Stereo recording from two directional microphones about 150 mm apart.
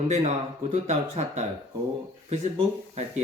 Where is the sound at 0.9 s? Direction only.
50° right (ahead or behind).